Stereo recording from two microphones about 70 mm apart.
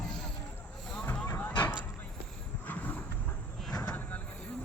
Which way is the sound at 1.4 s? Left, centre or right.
Left.